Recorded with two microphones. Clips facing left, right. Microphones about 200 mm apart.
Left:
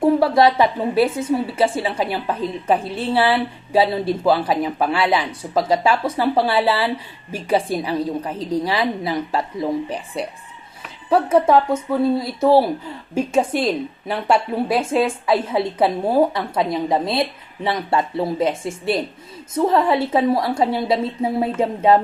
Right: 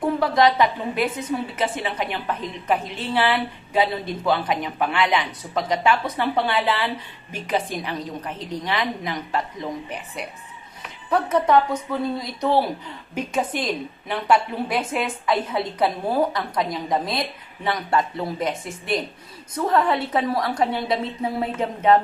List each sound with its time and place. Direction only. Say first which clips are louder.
0.0 s a woman's voice: left 4 dB; 30° left (ahead or behind)